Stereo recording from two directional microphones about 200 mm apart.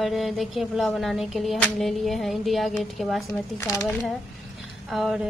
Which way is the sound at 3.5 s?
15° left (ahead or behind).